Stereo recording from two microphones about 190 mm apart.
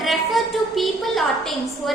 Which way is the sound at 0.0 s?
Centre (ahead or behind).